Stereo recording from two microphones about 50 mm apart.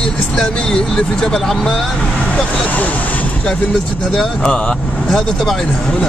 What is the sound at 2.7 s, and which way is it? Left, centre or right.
Speech, left.